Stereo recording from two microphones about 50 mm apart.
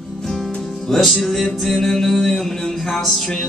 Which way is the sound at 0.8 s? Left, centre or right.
Centre.